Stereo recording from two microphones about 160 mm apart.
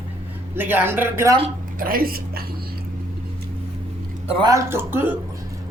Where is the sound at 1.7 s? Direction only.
65° right (ahead or behind).